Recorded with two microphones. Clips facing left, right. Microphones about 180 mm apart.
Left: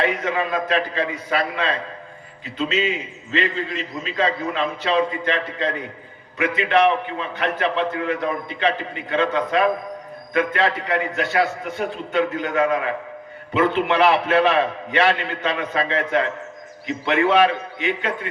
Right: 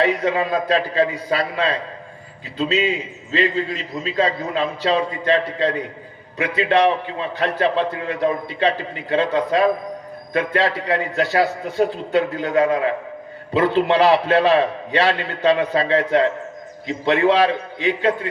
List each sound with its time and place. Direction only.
0.2 s a man's voice: 35° right (ahead or behind)